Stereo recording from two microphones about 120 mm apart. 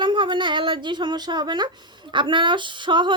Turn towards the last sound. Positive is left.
turn(degrees=-40)  # may be behind; listen again after turning